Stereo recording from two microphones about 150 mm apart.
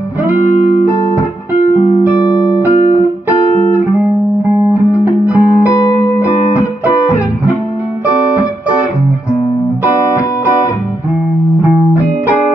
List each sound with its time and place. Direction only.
0.3 s music: 50° left (ahead or behind)
5.0 s music: 20° left (ahead or behind)